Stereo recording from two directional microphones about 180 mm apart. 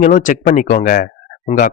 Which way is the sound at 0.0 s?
45° left (ahead or behind).